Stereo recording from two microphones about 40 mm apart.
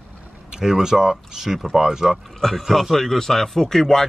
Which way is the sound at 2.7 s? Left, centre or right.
Centre.